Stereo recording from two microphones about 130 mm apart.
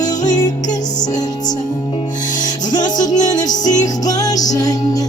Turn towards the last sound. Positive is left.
turn(degrees=30)  # may be behind; listen again after turning